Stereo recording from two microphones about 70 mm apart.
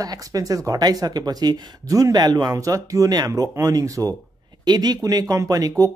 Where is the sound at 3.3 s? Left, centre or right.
Right.